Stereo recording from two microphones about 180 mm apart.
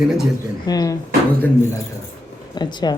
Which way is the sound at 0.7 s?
20° left (ahead or behind).